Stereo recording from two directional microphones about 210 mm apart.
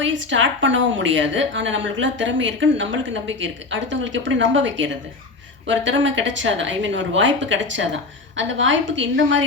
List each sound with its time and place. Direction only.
0.0 s a woman's voice: 60° right (ahead or behind)